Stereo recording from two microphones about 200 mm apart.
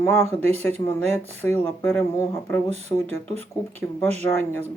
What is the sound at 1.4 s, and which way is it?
Speech, 10° left (ahead or behind).